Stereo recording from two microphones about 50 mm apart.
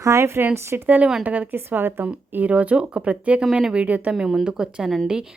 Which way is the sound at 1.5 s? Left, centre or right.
Right.